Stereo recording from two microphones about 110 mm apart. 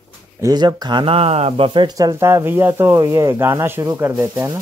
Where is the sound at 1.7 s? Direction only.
45° right (ahead or behind).